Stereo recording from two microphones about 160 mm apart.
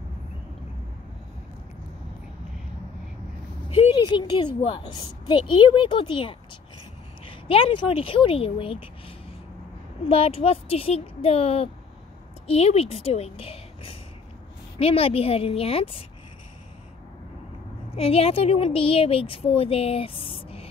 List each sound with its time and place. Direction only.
3.6 s a woman's voice: 35° left (ahead or behind)
10.0 s a woman's voice: 35° left (ahead or behind)
17.9 s a woman's voice: 35° left (ahead or behind)